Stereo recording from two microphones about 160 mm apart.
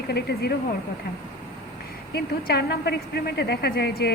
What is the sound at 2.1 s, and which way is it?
A woman's voice, 90° left.